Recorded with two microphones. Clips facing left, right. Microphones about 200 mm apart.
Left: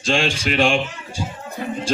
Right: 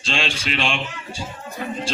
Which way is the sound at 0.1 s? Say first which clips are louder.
Left 5 dB; 45° left (ahead or behind).